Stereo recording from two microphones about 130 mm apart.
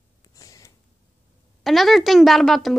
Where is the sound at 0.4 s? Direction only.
25° left (ahead or behind).